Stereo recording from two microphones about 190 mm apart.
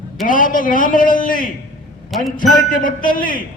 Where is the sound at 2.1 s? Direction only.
Centre (ahead or behind).